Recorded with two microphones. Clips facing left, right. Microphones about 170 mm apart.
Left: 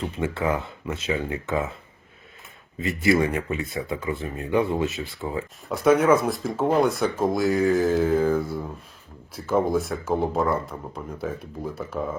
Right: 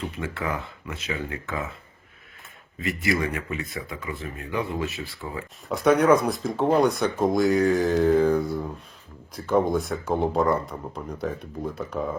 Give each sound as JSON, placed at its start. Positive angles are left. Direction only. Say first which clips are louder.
{"t": 0.2, "sound": "speech", "louder": "left 7 dB", "side_deg": 25}
{"t": 2.7, "sound": "speech", "louder": "left 5 dB", "side_deg": 25}
{"t": 5.6, "sound": "speech", "louder": "even", "side_deg": 0}